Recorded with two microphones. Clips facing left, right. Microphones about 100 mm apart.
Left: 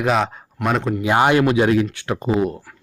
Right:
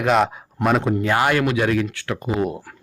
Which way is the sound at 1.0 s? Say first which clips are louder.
Left 7 dB; 20° left (ahead or behind).